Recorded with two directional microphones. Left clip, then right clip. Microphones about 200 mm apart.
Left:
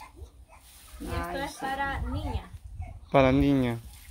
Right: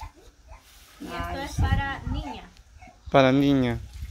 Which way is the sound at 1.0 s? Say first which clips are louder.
Right 1 dB; 20° right (ahead or behind).